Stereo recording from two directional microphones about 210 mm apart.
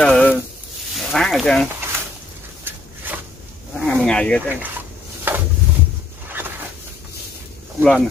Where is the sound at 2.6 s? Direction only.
10° right (ahead or behind).